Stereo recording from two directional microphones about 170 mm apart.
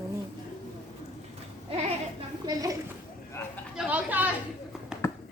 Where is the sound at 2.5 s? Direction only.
20° right (ahead or behind).